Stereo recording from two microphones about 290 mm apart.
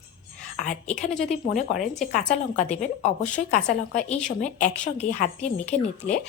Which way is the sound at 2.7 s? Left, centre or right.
Left.